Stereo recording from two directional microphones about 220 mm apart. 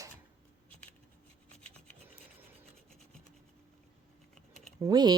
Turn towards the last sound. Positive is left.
turn(degrees=-20)  # may be behind; listen again after turning